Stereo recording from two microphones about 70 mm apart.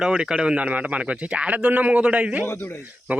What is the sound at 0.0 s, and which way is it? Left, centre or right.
A man's voice, centre.